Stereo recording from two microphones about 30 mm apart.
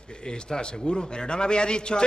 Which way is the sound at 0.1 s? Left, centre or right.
Left.